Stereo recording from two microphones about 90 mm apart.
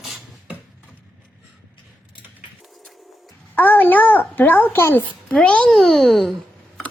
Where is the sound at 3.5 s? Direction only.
20° left (ahead or behind).